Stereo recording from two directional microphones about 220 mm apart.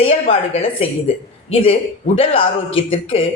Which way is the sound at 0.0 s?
25° left (ahead or behind).